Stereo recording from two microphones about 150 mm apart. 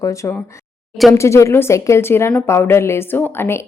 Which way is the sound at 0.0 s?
20° left (ahead or behind).